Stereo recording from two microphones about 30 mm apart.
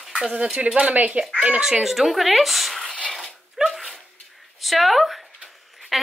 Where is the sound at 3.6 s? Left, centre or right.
Centre.